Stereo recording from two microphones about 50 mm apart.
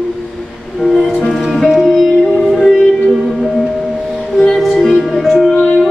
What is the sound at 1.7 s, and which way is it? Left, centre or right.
Music, centre.